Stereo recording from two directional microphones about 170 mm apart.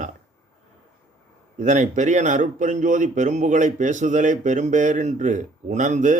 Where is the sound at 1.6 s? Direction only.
45° right (ahead or behind).